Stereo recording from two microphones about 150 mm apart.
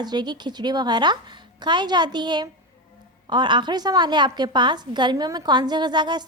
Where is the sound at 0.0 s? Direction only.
30° right (ahead or behind).